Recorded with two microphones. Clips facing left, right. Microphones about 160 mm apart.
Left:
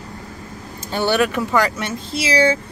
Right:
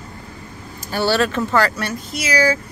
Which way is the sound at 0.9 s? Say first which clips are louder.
Even; 15° left (ahead or behind).